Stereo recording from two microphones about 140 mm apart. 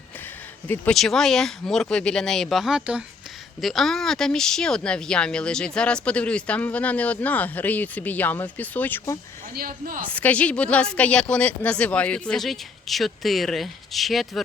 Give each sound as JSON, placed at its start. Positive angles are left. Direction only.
{"t": 0.7, "sound": "speech", "side_deg": 5}
{"t": 9.6, "sound": "speech", "side_deg": -90}
{"t": 10.1, "sound": "speech", "side_deg": 10}